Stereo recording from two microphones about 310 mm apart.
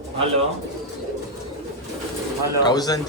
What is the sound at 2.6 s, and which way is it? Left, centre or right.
Speech, centre.